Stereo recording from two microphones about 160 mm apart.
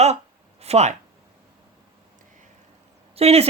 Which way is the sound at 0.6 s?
40° right (ahead or behind).